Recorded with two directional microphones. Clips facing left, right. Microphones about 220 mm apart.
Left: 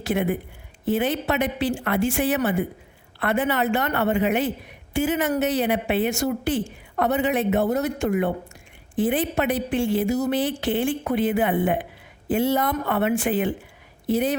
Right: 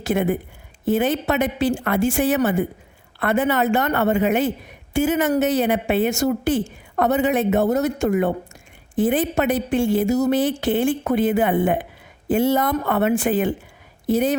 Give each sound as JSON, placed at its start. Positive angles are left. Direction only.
{"t": 0.0, "sound": "a woman's voice", "side_deg": -45}